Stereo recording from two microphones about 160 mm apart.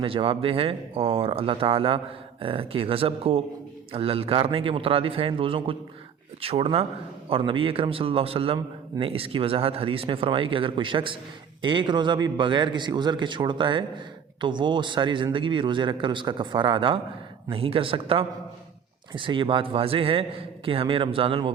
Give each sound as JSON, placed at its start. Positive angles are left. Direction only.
{"t": 0.0, "sound": "a man's voice", "side_deg": -35}